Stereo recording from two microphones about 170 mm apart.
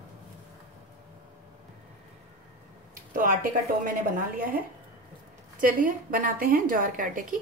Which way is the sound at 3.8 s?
55° right (ahead or behind).